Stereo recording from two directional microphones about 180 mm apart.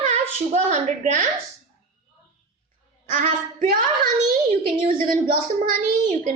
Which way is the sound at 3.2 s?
45° right (ahead or behind).